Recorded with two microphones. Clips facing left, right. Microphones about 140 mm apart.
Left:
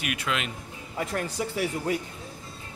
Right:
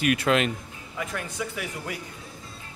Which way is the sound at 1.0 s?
35° left (ahead or behind).